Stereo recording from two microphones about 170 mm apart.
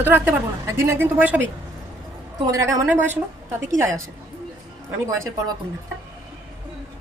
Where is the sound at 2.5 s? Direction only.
20° right (ahead or behind).